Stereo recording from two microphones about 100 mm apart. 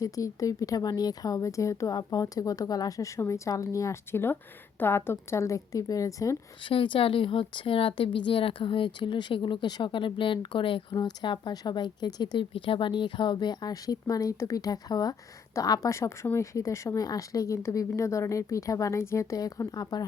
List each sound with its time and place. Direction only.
0.0 s speech: 35° left (ahead or behind)
3.2 s speech: 30° left (ahead or behind)
6.7 s a woman's voice: 55° left (ahead or behind)
10.9 s a woman's voice: 50° left (ahead or behind)